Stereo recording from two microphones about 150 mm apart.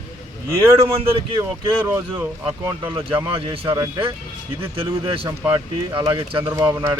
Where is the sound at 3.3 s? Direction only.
35° right (ahead or behind).